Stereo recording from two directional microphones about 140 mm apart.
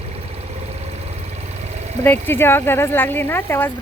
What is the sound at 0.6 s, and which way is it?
Vehicle, 50° right (ahead or behind).